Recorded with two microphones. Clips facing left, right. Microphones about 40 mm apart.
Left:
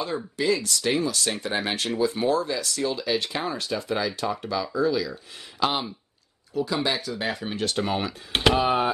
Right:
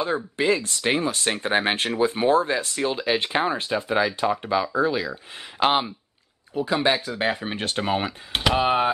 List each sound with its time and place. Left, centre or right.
0.0 s speech: right
8.3 s speech: centre
8.5 s speech: right